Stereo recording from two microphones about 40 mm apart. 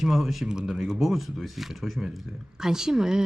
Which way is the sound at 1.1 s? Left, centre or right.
Centre.